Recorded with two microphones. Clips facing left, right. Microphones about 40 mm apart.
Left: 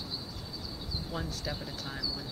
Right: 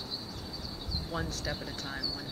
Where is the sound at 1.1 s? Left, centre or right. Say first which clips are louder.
Right 2 dB; centre.